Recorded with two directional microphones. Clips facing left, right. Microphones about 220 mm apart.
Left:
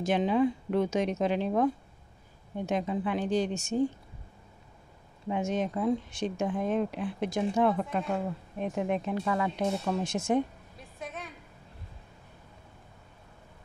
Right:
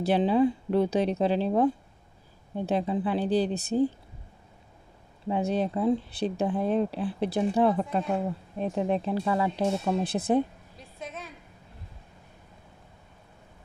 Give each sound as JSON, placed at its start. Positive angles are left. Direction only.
{"t": 0.0, "sound": "speech", "side_deg": -35}
{"t": 5.3, "sound": "speech", "side_deg": -35}
{"t": 11.0, "sound": "a sound", "side_deg": 0}